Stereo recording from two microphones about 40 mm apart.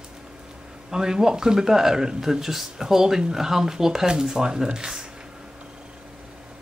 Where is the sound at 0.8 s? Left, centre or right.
Centre.